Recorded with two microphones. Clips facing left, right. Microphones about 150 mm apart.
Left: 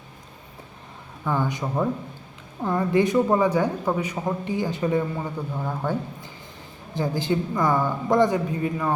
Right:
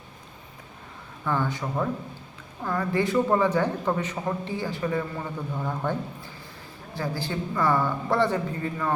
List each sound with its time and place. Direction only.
1.2 s speech: 15° left (ahead or behind)